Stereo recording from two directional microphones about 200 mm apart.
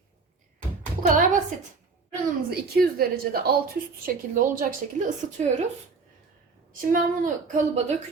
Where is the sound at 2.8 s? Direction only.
50° right (ahead or behind).